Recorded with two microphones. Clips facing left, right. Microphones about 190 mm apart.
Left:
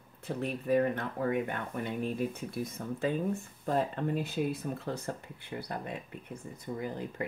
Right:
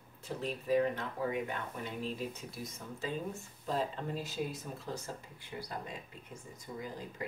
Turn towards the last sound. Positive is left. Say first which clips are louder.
# left 6 dB
turn(degrees=60)  # may be behind; listen again after turning